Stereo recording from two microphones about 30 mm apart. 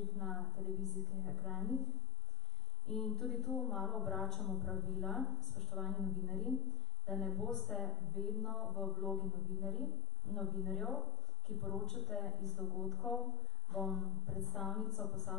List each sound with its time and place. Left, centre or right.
0.0 s speech: centre
11.5 s a man's voice: centre